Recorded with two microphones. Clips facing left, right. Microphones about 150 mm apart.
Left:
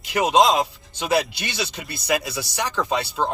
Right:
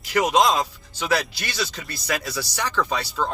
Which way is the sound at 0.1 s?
25° left (ahead or behind).